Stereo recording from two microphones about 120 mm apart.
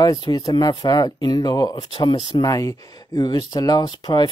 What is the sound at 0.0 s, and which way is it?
Speech, 35° left (ahead or behind).